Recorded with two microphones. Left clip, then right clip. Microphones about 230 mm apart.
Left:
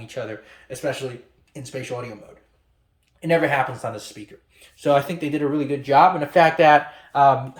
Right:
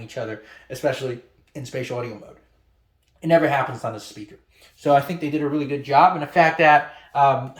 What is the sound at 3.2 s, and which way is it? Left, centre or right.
Speech, centre.